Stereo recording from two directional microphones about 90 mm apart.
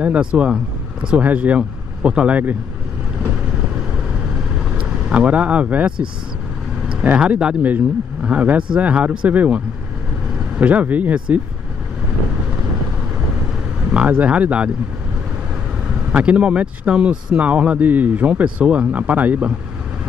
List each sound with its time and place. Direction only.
0.0 s speech: 15° right (ahead or behind)
4.7 s speech: 15° right (ahead or behind)
10.6 s speech: 15° right (ahead or behind)
13.9 s speech: 15° right (ahead or behind)
15.9 s speech: 15° right (ahead or behind)